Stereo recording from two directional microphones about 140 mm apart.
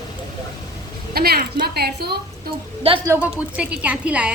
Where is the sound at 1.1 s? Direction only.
90° right.